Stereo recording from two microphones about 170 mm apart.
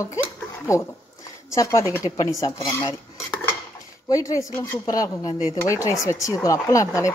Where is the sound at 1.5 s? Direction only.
20° left (ahead or behind).